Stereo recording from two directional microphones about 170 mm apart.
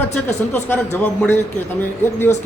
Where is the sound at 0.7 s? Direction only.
10° left (ahead or behind).